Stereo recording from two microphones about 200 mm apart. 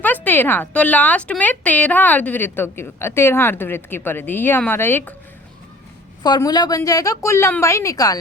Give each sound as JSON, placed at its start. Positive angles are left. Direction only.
{"t": 0.0, "sound": "a woman's voice", "side_deg": 10}
{"t": 6.2, "sound": "a woman's voice", "side_deg": 20}